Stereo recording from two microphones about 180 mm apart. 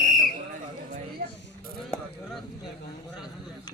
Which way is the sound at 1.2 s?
50° right (ahead or behind).